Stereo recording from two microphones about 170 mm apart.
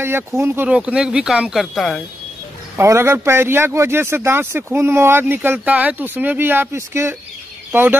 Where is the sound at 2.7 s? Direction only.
15° right (ahead or behind).